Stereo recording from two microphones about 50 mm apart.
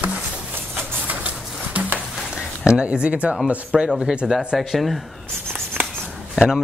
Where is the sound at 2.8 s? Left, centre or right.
Right.